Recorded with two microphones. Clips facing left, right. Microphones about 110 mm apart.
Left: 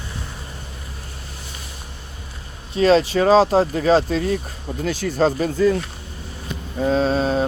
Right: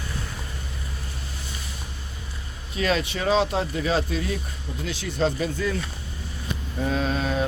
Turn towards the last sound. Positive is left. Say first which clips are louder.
# left 6 dB
turn(degrees=30)  # may be behind; listen again after turning